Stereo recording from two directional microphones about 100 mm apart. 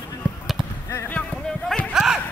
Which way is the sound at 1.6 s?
10° left (ahead or behind).